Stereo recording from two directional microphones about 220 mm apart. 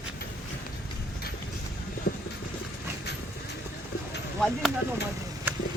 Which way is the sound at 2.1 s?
45° left (ahead or behind).